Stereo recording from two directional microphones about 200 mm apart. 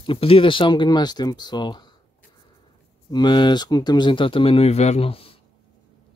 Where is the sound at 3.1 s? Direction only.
20° left (ahead or behind).